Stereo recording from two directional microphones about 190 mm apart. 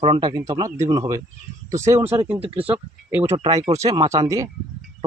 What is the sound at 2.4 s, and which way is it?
Speech, 30° right (ahead or behind).